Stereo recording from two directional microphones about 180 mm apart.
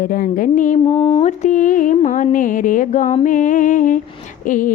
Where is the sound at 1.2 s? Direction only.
45° left (ahead or behind).